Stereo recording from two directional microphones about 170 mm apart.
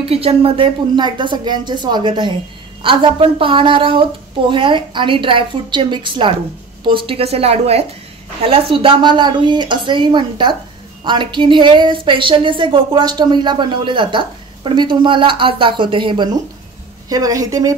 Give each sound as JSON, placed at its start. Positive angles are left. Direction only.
{"t": 0.0, "sound": "a woman's voice", "side_deg": -35}